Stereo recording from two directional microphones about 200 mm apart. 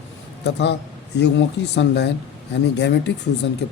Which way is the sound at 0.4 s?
60° left (ahead or behind).